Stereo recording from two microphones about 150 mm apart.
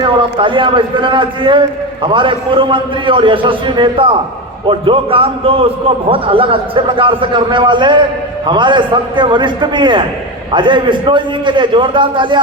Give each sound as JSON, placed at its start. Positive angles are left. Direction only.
{"t": 0.2, "sound": "a man's voice", "side_deg": -35}